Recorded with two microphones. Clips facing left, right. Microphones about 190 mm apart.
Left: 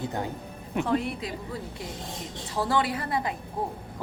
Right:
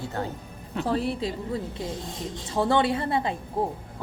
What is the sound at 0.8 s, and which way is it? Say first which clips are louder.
Speech: right 3 dB; 35° right (ahead or behind).